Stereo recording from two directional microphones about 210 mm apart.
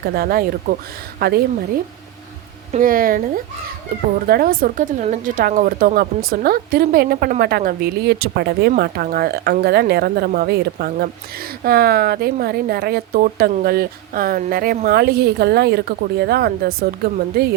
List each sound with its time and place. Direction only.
0.0 s speech: 45° right (ahead or behind)
2.7 s speech: 40° right (ahead or behind)